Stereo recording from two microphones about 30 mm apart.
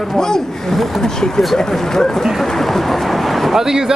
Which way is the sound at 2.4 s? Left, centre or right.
Centre.